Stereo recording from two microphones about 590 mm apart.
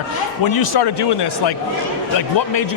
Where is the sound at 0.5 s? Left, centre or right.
Left.